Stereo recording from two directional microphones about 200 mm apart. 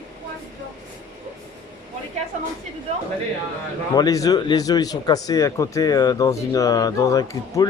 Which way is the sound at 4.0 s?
15° left (ahead or behind).